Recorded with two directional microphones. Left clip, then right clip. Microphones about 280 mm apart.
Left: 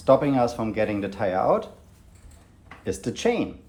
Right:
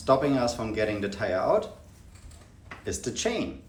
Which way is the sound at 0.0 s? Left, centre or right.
Left.